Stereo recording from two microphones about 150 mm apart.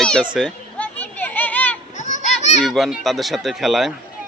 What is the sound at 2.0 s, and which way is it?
Children playing, 55° left (ahead or behind).